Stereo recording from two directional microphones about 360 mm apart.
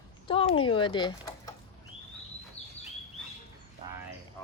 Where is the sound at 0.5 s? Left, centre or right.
Centre.